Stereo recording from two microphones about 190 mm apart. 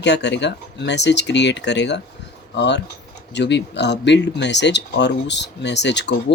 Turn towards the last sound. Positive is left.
turn(degrees=65)  # may be behind; listen again after turning